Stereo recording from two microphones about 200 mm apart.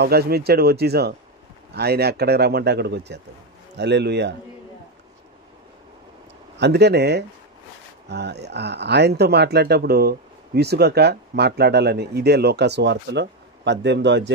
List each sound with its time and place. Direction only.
0.0 s speech: 50° right (ahead or behind)
6.6 s speech: 55° right (ahead or behind)